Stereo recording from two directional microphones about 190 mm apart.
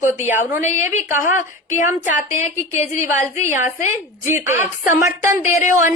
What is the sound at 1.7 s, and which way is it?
A woman's voice, 40° left (ahead or behind).